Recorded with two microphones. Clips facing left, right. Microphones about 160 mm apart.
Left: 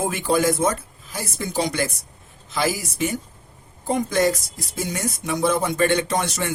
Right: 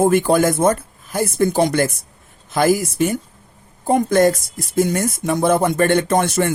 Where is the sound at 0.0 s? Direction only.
55° right (ahead or behind).